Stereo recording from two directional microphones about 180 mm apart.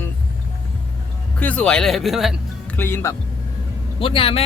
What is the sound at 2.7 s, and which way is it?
Speech, 10° left (ahead or behind).